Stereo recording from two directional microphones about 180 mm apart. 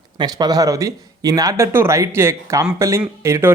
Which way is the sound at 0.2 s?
25° right (ahead or behind).